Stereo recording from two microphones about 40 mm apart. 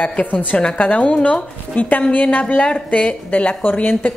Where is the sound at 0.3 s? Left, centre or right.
Left.